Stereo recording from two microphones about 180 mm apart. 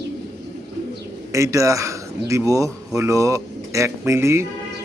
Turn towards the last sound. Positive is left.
turn(degrees=-15)  # may be behind; listen again after turning